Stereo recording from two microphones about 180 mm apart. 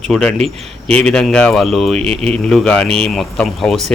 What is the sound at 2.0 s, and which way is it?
Speech, 35° right (ahead or behind).